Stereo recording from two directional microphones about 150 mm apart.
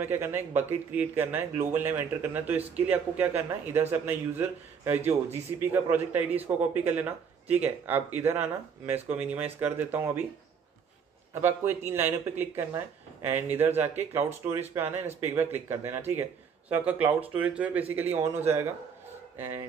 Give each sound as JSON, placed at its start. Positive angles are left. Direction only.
{"t": 0.0, "sound": "a man's voice", "side_deg": -15}
{"t": 11.4, "sound": "a man's voice", "side_deg": -15}